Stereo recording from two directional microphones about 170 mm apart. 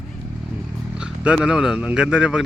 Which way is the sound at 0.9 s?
5° right (ahead or behind).